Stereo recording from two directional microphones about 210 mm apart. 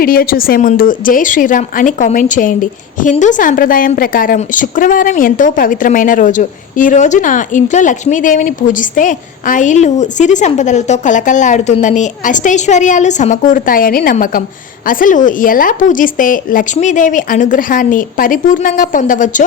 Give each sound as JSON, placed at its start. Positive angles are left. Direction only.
{"t": 0.0, "sound": "a woman's voice", "side_deg": 45}